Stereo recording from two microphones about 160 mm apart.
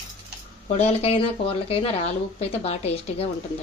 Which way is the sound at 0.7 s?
40° left (ahead or behind).